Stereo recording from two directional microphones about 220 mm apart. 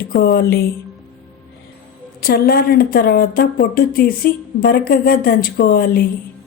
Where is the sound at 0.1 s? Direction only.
40° left (ahead or behind).